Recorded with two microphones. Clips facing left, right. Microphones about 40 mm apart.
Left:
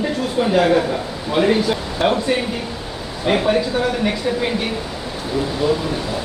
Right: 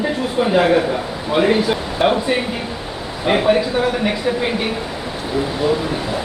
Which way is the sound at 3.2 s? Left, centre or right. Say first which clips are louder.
Right 2 dB; centre.